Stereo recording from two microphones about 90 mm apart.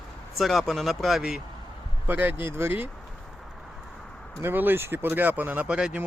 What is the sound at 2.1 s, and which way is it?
Speech, 20° right (ahead or behind).